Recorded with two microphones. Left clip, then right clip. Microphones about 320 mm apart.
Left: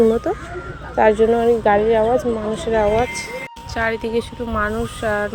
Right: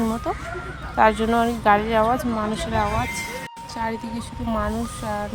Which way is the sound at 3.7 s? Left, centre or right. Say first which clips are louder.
Left 8 dB; centre.